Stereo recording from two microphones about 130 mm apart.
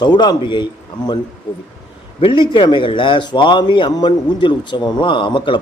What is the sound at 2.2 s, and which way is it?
A man's voice, 40° left (ahead or behind).